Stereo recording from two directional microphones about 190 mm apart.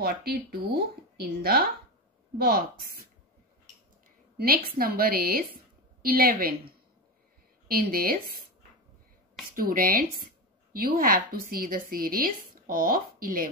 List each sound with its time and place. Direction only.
0.0 s speech: 55° right (ahead or behind)
4.4 s speech: 50° right (ahead or behind)
7.6 s speech: 50° right (ahead or behind)
9.6 s speech: 50° right (ahead or behind)